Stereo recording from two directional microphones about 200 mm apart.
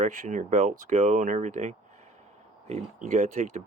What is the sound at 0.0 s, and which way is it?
Speech, 40° right (ahead or behind).